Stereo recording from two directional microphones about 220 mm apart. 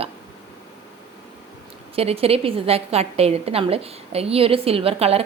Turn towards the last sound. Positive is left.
turn(degrees=-25)  # may be behind; listen again after turning